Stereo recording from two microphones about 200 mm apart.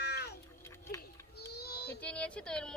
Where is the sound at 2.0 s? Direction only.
5° left (ahead or behind).